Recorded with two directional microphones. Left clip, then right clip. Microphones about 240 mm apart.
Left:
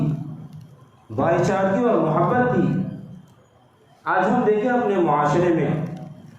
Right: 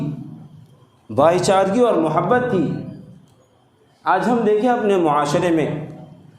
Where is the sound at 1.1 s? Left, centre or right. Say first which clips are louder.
Right 6 dB; right.